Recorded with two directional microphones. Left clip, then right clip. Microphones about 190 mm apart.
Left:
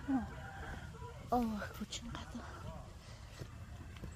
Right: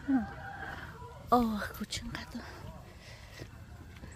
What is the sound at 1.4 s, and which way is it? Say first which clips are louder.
Speech: right 6 dB; 25° right (ahead or behind).